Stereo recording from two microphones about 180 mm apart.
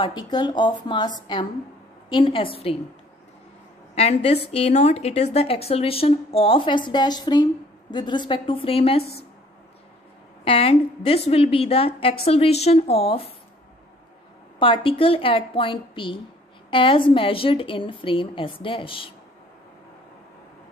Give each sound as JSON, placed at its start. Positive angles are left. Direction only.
{"t": 0.0, "sound": "a woman's voice", "side_deg": 25}
{"t": 3.9, "sound": "a woman's voice", "side_deg": 35}
{"t": 10.4, "sound": "a woman's voice", "side_deg": 30}
{"t": 14.6, "sound": "a woman's voice", "side_deg": 30}